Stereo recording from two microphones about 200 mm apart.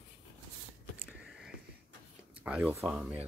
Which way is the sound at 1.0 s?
5° right (ahead or behind).